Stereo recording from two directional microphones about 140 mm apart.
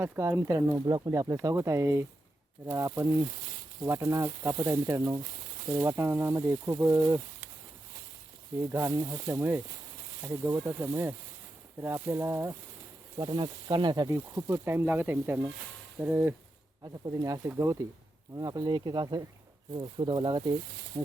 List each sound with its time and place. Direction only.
0.0 s speech: 20° right (ahead or behind)
8.7 s speech: 25° right (ahead or behind)
13.1 s speech: 30° right (ahead or behind); by 16.3 s 15° right (ahead or behind)
16.8 s speech: 25° right (ahead or behind)